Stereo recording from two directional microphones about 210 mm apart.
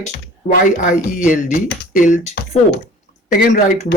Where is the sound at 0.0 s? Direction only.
40° left (ahead or behind).